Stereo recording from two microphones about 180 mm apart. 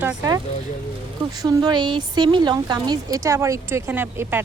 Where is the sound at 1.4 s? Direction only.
25° right (ahead or behind).